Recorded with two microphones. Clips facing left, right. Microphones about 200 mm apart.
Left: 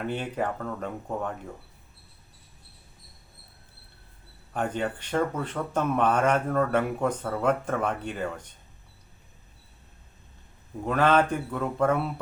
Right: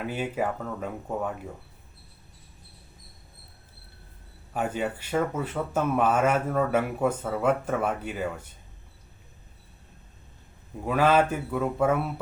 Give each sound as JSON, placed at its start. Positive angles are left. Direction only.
{"t": 0.0, "sound": "speech", "side_deg": -5}
{"t": 4.5, "sound": "speech", "side_deg": -5}
{"t": 10.8, "sound": "speech", "side_deg": -5}